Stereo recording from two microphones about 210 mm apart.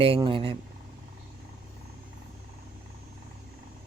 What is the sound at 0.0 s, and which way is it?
Speech, 25° right (ahead or behind).